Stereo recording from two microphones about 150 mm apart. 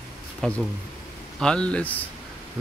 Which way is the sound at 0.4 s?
5° left (ahead or behind).